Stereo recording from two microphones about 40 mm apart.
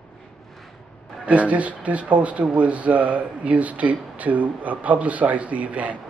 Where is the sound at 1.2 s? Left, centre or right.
Right.